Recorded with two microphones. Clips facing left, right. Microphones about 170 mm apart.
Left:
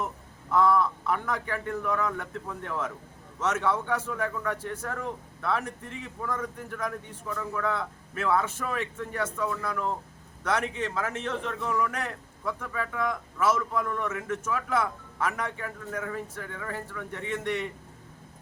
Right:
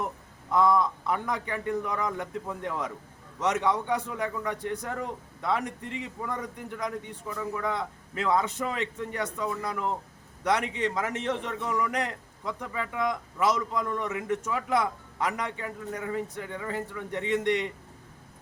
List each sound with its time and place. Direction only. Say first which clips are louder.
0.5 s a man's voice: even; 15° right (ahead or behind)